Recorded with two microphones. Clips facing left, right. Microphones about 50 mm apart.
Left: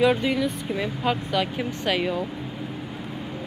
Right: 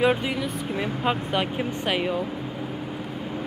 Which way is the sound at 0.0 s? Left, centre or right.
Centre.